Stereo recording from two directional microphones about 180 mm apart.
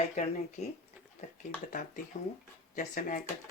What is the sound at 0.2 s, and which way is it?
Speech, 40° left (ahead or behind).